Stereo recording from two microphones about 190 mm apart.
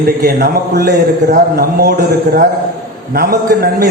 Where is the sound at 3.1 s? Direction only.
55° right (ahead or behind).